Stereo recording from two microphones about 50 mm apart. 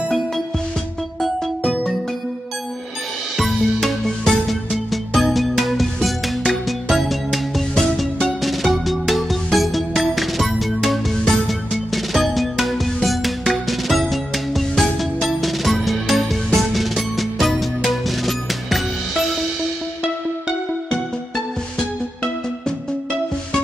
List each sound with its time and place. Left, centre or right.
1.6 s music: centre
3.3 s music: centre